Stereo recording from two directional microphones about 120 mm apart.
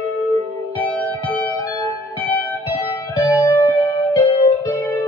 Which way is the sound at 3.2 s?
15° right (ahead or behind).